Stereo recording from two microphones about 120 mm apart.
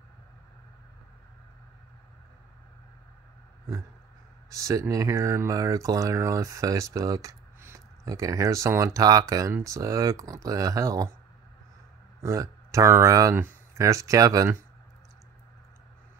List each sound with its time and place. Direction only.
4.5 s speech: 25° right (ahead or behind)
12.2 s speech: 25° right (ahead or behind)